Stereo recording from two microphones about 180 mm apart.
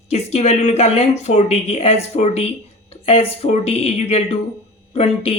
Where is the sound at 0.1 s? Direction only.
35° left (ahead or behind).